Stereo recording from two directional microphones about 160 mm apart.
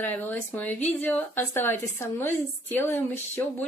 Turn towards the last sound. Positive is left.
turn(degrees=15)  # may be behind; listen again after turning